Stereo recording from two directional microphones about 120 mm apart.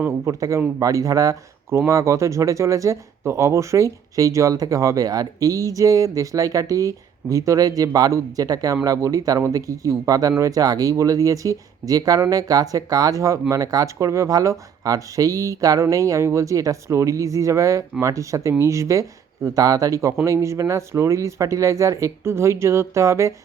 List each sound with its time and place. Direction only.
0.3 s speech: 30° right (ahead or behind)